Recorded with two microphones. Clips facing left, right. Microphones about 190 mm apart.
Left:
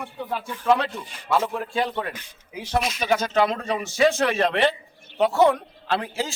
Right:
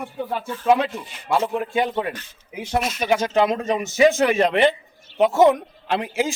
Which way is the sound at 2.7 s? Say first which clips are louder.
Right 2 dB; 5° right (ahead or behind).